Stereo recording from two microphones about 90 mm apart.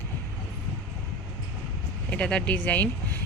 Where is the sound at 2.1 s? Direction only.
10° left (ahead or behind).